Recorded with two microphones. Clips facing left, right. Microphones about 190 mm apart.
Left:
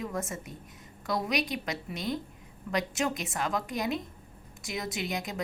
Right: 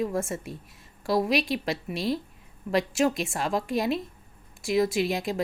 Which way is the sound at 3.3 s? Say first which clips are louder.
Right 4 dB; 30° right (ahead or behind).